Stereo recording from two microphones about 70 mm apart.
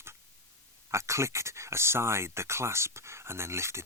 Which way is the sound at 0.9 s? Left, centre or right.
Right.